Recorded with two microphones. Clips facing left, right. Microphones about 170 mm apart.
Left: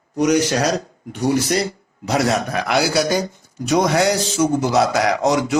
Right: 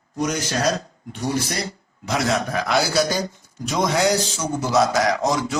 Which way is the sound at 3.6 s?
65° left (ahead or behind).